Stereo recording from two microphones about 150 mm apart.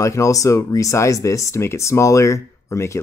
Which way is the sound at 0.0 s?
20° left (ahead or behind).